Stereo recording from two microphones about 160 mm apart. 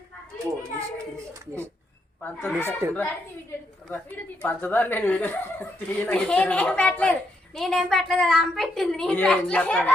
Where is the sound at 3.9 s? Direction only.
10° left (ahead or behind).